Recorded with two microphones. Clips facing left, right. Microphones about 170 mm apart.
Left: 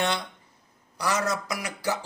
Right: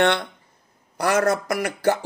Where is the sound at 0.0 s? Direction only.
60° right (ahead or behind).